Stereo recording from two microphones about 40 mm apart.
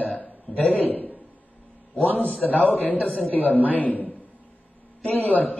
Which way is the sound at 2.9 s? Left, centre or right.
Left.